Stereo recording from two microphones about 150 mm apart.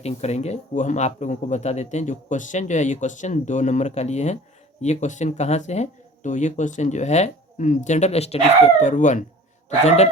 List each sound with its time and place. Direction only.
0.0 s a man's voice: 45° left (ahead or behind)